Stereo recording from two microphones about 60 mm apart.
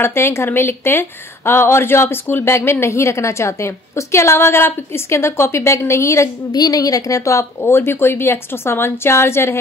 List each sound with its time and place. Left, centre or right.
0.0 s speech: left
7.6 s speech: left